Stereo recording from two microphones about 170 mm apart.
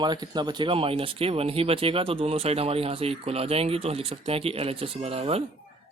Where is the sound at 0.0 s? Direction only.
25° right (ahead or behind).